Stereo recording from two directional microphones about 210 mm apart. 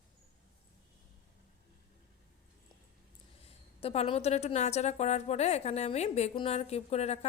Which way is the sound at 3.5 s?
30° left (ahead or behind).